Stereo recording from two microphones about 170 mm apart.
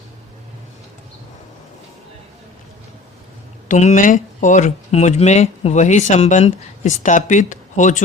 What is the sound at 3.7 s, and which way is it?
Speech, 45° left (ahead or behind).